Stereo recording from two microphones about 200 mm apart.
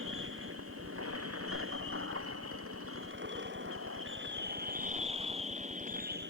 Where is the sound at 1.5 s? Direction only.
90° right; by 6.3 s 50° right (ahead or behind).